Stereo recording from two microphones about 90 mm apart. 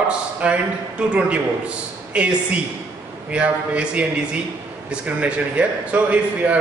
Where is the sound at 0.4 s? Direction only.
10° right (ahead or behind).